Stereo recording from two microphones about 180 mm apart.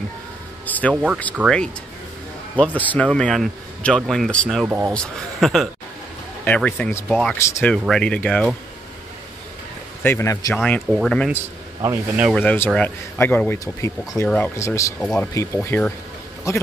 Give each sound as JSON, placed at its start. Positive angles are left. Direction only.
{"t": 0.7, "sound": "a sound", "side_deg": 10}
{"t": 1.3, "sound": "a man's voice", "side_deg": 0}
{"t": 4.6, "sound": "a man's voice", "side_deg": -10}
{"t": 4.9, "sound": "a man's voice", "side_deg": 5}
{"t": 7.1, "sound": "a man's voice", "side_deg": 0}
{"t": 7.3, "sound": "speech", "side_deg": 15}
{"t": 7.7, "sound": "a man's voice", "side_deg": 5}
{"t": 10.0, "sound": "speech", "side_deg": 15}
{"t": 10.6, "sound": "a man's voice", "side_deg": 5}
{"t": 11.8, "sound": "a man's voice", "side_deg": -15}
{"t": 12.4, "sound": "speech", "side_deg": 10}
{"t": 15.0, "sound": "a man's voice", "side_deg": 5}
{"t": 15.3, "sound": "speech", "side_deg": 15}